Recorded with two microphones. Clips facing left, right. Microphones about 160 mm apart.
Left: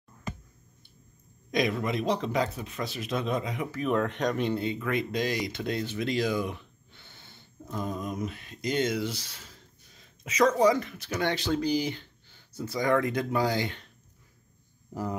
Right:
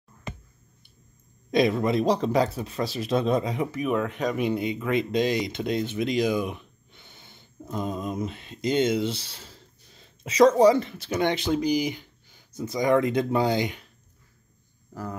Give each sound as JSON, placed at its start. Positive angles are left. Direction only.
{"t": 1.5, "sound": "speech", "side_deg": -30}
{"t": 3.9, "sound": "speech", "side_deg": -5}
{"t": 14.9, "sound": "speech", "side_deg": 15}